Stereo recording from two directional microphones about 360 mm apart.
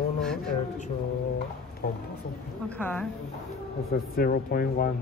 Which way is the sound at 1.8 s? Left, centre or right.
Left.